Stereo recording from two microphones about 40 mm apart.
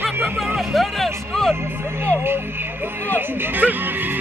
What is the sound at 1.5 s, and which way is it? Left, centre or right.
Speech, right.